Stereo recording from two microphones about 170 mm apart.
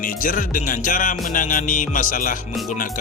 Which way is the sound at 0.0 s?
55° left (ahead or behind).